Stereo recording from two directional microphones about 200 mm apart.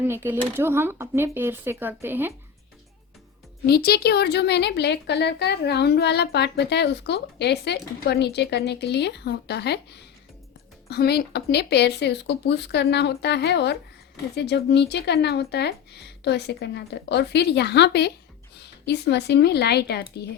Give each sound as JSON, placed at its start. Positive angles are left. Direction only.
{"t": 0.0, "sound": "speech", "side_deg": -10}
{"t": 3.7, "sound": "a woman's voice", "side_deg": 50}